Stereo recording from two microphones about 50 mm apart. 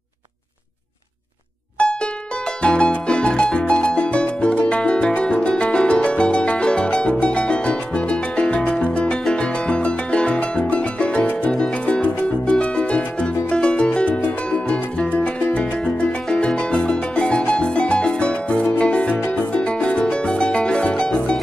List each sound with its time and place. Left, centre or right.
1.8 s music: left